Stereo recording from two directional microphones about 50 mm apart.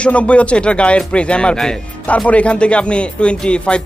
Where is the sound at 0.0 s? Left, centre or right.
Left.